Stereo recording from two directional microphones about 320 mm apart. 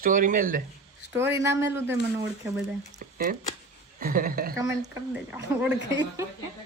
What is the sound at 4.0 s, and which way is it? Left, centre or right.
Speech, right.